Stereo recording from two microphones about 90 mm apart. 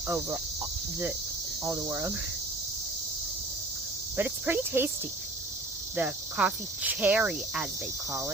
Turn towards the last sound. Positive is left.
turn(degrees=-10)  # may be behind; listen again after turning